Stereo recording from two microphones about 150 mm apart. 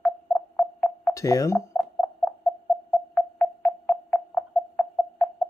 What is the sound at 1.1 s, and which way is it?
Speech, 20° left (ahead or behind).